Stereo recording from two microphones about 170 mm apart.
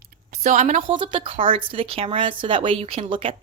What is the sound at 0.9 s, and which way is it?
Speech, 30° right (ahead or behind).